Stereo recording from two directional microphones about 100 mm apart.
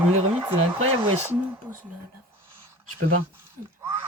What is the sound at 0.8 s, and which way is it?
Speech, 80° right.